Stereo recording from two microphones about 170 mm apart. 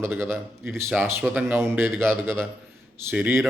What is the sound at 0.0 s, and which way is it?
A man's voice, 15° right (ahead or behind).